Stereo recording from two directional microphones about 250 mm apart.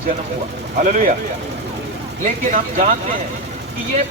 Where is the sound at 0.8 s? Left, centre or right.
Right.